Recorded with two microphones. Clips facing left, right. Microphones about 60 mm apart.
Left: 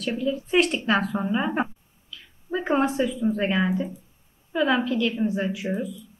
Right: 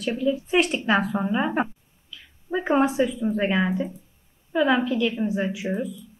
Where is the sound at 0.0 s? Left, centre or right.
Centre.